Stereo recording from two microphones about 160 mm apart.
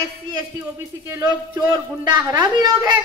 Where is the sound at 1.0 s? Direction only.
15° right (ahead or behind).